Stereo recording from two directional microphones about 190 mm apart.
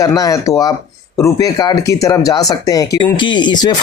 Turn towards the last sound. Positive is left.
turn(degrees=20)  # may be behind; listen again after turning